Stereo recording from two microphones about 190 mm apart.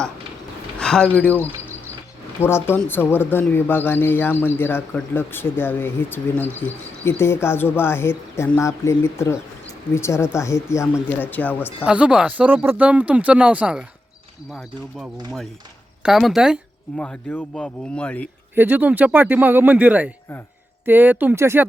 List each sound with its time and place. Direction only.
0.8 s speech: 5° left (ahead or behind)
11.9 s speech: 5° right (ahead or behind)
17.0 s speech: 10° left (ahead or behind)
18.5 s speech: 10° right (ahead or behind)